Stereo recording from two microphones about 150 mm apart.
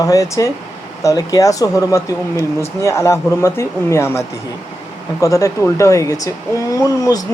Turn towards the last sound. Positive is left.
turn(degrees=20)  # may be behind; listen again after turning